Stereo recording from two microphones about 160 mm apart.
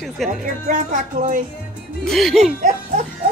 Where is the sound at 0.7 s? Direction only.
55° right (ahead or behind).